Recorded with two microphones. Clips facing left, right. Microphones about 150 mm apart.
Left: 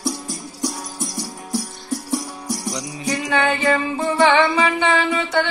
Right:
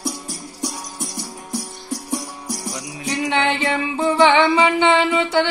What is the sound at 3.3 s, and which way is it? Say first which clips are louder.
Music: left 2 dB; 25° right (ahead or behind).